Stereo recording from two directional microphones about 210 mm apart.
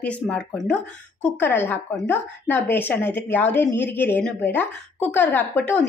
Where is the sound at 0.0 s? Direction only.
5° left (ahead or behind).